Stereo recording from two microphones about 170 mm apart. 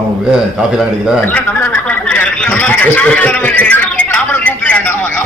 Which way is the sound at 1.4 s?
10° left (ahead or behind).